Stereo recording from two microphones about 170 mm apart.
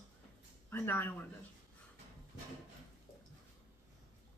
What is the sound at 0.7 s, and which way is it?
Speech, 10° left (ahead or behind).